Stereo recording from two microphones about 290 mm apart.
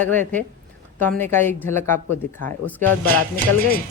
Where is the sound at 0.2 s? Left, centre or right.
Right.